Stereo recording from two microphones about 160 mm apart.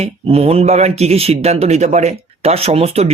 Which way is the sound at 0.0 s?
40° right (ahead or behind).